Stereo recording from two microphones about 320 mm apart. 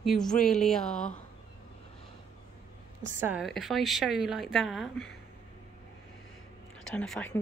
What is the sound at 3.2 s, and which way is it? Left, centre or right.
Speech, centre.